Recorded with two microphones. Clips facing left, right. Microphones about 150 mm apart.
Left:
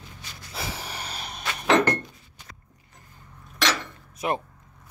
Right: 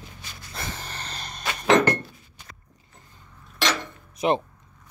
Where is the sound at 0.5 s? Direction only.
10° left (ahead or behind).